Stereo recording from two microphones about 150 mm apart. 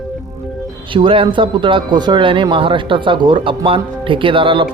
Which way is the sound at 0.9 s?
35° right (ahead or behind).